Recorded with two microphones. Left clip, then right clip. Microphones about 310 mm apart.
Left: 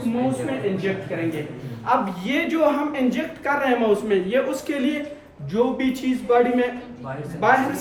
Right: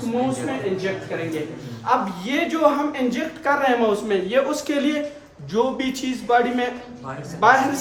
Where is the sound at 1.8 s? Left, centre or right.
Centre.